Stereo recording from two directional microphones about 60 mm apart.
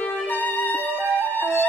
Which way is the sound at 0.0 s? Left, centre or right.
Left.